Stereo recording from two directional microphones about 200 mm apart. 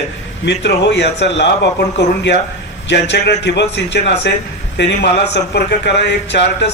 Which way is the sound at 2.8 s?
60° left (ahead or behind).